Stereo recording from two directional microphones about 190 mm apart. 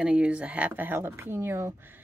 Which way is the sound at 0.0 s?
5° right (ahead or behind).